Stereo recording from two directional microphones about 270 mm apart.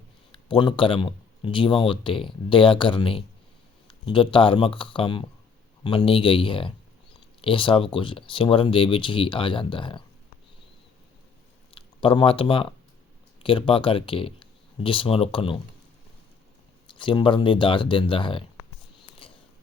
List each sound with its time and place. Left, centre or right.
0.3 s speech: centre
11.7 s speech: centre
16.8 s speech: centre
19.2 s a sound: centre